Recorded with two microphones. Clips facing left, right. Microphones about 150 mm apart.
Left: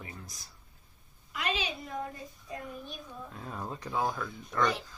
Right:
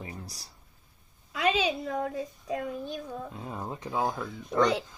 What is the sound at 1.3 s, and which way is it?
A woman's voice, 90° right.